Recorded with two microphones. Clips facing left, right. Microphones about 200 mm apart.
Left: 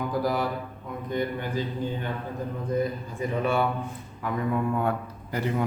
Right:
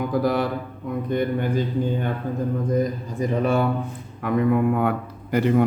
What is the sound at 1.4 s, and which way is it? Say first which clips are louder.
Speech: right 6 dB; 50° right (ahead or behind).